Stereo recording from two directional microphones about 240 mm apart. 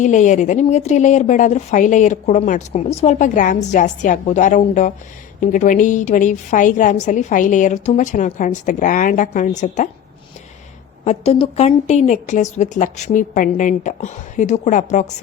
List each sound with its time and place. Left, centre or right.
0.0 s a woman's voice: left
11.0 s a woman's voice: left